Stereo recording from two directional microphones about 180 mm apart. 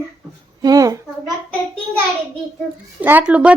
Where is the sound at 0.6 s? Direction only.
20° right (ahead or behind).